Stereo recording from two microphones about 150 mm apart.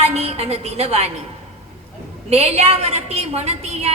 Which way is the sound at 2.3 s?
45° right (ahead or behind).